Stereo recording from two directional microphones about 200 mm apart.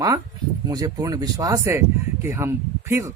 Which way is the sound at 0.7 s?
20° right (ahead or behind).